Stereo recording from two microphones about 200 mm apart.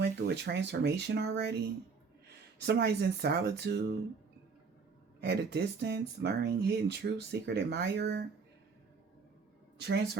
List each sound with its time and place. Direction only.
0.0 s speech: 60° right (ahead or behind)
5.2 s speech: 55° right (ahead or behind)